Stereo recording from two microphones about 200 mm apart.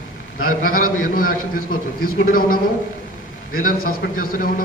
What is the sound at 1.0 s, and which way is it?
A man's voice, 45° left (ahead or behind).